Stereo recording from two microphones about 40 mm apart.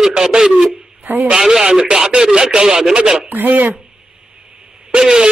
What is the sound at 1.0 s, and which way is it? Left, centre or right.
Speech, right.